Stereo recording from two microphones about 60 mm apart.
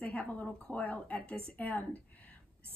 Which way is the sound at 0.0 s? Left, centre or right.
Left.